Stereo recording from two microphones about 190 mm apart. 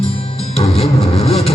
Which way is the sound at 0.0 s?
30° left (ahead or behind).